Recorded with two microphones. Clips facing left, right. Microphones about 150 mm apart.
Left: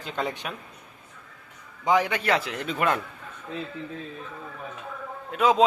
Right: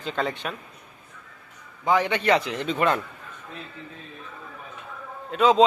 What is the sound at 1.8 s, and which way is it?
Speech, 15° left (ahead or behind).